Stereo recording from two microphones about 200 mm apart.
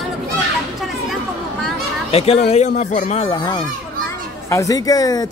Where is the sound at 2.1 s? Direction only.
30° left (ahead or behind).